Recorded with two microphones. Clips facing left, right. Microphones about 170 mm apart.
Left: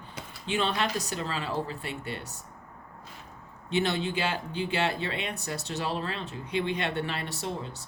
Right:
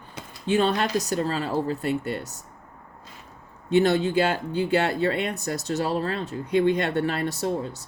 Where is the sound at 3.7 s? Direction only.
45° right (ahead or behind).